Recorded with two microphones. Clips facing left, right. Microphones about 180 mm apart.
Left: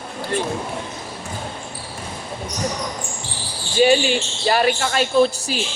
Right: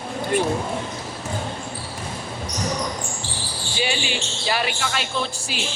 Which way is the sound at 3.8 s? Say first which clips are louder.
Left 11 dB; 45° left (ahead or behind).